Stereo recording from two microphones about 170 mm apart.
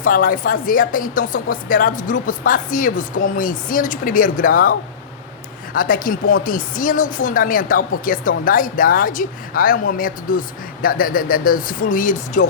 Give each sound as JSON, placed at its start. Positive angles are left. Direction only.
{"t": 0.0, "sound": "speech", "side_deg": 55}
{"t": 5.7, "sound": "speech", "side_deg": 55}